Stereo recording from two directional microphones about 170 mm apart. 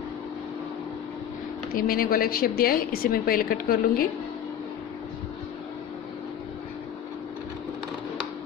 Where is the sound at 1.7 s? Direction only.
60° left (ahead or behind).